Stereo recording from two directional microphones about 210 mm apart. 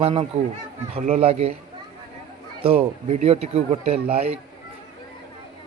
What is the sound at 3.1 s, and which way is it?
A man's voice, 30° right (ahead or behind).